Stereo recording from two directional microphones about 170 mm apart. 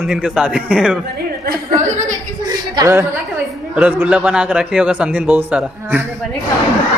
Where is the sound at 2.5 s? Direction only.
20° right (ahead or behind).